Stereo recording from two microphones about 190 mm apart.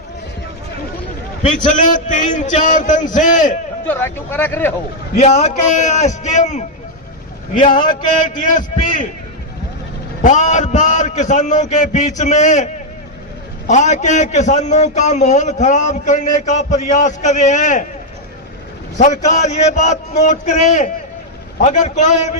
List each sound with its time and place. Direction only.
1.4 s a man's voice: 40° left (ahead or behind)
3.8 s speech: 10° left (ahead or behind)
5.1 s a man's voice: 35° left (ahead or behind)
10.2 s a man's voice: 40° left (ahead or behind)
18.9 s a man's voice: 40° left (ahead or behind)